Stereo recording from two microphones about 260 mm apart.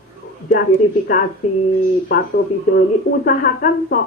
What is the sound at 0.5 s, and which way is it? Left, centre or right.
A woman's voice, left.